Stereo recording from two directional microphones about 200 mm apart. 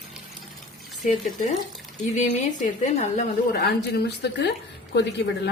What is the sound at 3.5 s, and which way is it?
A woman's voice, 55° left (ahead or behind).